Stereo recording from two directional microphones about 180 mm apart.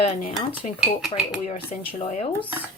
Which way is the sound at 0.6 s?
40° left (ahead or behind).